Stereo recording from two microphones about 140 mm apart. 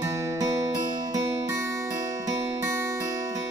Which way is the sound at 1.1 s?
20° right (ahead or behind).